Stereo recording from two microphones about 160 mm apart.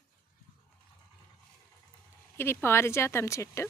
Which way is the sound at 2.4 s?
15° left (ahead or behind).